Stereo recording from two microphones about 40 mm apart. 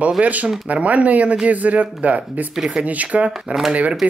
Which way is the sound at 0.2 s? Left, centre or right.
Right.